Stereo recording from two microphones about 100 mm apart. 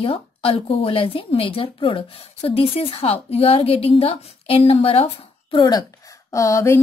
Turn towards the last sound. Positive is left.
turn(degrees=30)  # may be behind; listen again after turning